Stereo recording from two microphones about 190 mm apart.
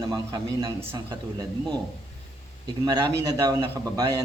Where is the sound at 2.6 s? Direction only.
25° right (ahead or behind).